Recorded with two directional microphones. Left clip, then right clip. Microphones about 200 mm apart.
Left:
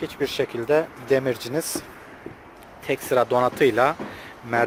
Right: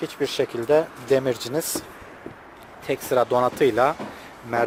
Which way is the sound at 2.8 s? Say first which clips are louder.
Even; 5° right (ahead or behind).